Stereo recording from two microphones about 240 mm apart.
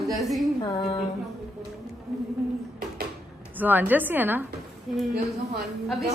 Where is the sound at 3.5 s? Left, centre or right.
Centre.